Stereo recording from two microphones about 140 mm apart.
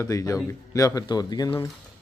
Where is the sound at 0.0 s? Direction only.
20° left (ahead or behind).